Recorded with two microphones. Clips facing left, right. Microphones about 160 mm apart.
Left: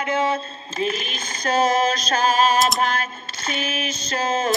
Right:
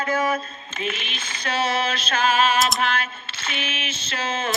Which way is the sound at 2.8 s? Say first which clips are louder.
Left 1 dB; 40° left (ahead or behind).